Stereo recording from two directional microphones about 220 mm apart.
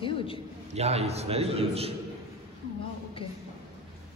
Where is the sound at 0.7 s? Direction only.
30° right (ahead or behind).